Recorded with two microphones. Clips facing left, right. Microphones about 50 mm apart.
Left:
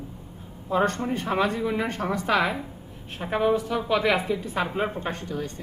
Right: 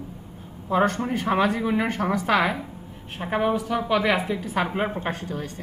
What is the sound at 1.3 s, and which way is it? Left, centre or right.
Speech, right.